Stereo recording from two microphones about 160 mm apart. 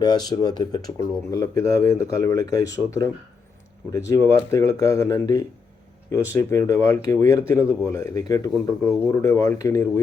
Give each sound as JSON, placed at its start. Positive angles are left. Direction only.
{"t": 0.0, "sound": "speech", "side_deg": 25}